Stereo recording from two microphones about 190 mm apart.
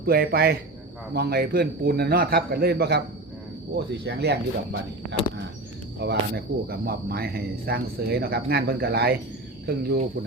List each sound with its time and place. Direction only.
0.0 s speech: 55° right (ahead or behind)
6.0 s speech: 60° right (ahead or behind)